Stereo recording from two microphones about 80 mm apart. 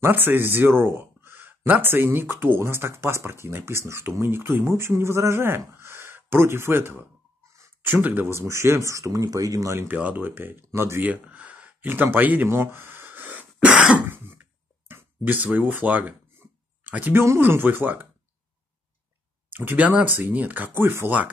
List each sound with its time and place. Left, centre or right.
0.0 s speech: right
9.8 s speech: right
11.1 s a sound: centre
14.0 s a sound: right
17.2 s speech: right
19.5 s speech: right